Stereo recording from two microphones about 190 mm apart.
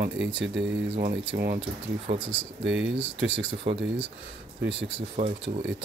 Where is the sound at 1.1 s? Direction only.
55° right (ahead or behind).